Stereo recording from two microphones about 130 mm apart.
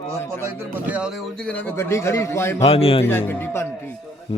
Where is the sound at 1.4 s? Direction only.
10° left (ahead or behind).